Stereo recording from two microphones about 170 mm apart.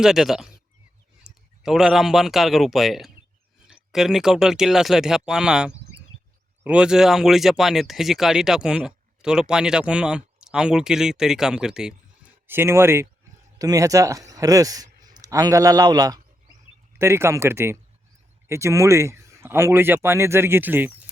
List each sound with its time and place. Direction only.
0.0 s speech: centre (ahead or behind)